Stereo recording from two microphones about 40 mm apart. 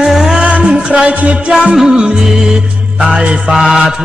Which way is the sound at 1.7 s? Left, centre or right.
Centre.